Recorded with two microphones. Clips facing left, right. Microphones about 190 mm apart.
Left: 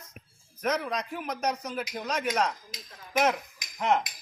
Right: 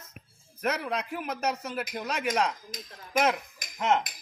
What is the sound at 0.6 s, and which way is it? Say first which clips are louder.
A man's voice: left 1 dB; 10° right (ahead or behind).